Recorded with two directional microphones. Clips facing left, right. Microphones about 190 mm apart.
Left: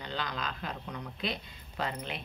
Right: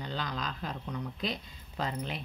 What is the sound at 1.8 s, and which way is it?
Speech, 40° right (ahead or behind).